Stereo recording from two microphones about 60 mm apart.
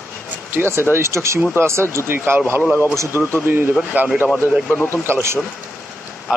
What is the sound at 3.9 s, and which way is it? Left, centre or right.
Speech, right.